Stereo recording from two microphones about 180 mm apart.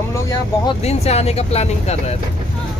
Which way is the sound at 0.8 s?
35° left (ahead or behind).